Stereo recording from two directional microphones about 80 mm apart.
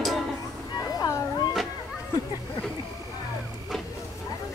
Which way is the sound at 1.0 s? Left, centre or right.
Left.